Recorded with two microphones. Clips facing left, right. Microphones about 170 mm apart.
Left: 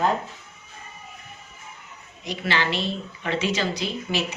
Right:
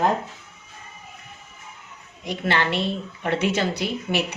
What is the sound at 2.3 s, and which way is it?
A woman's voice, 55° right (ahead or behind).